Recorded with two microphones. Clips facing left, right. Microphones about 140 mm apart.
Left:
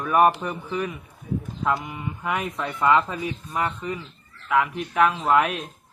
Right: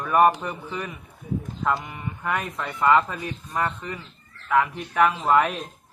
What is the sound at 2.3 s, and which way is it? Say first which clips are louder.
A man's voice: left 1 dB; centre (ahead or behind).